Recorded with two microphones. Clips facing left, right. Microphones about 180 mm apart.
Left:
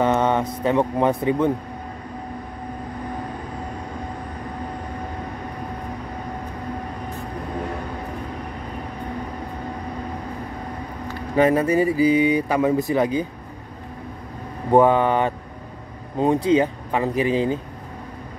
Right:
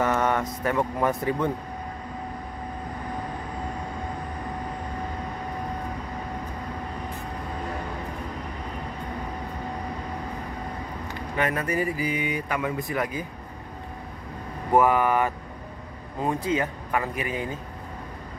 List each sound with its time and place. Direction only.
0.0 s speech: 25° left (ahead or behind)
11.3 s speech: 30° left (ahead or behind)
14.7 s speech: 25° left (ahead or behind)
16.4 s speech: 25° left (ahead or behind)